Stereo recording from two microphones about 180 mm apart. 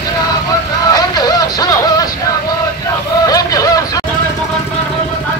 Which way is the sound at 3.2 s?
20° left (ahead or behind).